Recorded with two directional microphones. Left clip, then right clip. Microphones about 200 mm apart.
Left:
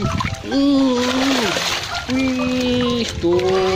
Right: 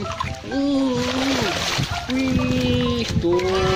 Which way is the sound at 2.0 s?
Centre (ahead or behind).